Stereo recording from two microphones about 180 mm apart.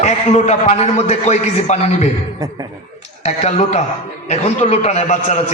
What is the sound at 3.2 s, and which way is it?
A man's voice, 40° left (ahead or behind).